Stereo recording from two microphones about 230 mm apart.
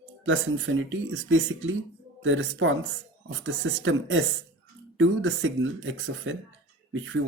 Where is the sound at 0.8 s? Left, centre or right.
Right.